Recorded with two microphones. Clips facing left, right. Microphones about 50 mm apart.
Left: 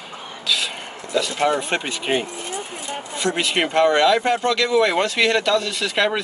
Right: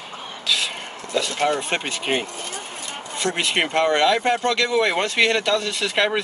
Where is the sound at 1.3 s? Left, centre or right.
Centre.